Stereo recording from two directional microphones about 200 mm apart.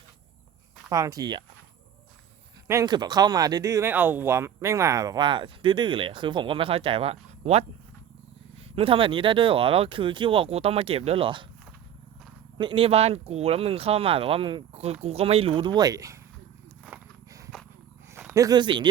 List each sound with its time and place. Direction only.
0.9 s speech: 15° right (ahead or behind)
2.6 s speech: 20° right (ahead or behind)
8.7 s speech: 25° right (ahead or behind)
12.5 s speech: 25° right (ahead or behind)
16.8 s a sound: 10° right (ahead or behind)
18.1 s speech: 10° right (ahead or behind)